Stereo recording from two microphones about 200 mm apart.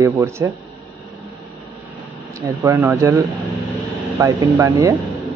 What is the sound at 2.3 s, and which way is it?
Speech, 15° right (ahead or behind).